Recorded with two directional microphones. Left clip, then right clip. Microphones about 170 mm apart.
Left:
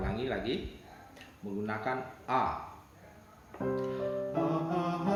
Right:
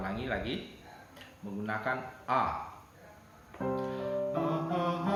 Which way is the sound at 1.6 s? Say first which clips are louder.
Right 1 dB; 5° right (ahead or behind).